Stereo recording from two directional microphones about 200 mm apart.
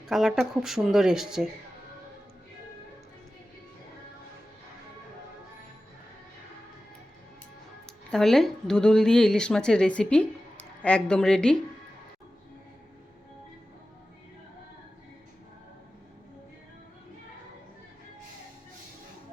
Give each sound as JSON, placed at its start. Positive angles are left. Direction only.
{"t": 0.1, "sound": "speech", "side_deg": 0}
{"t": 8.1, "sound": "speech", "side_deg": 0}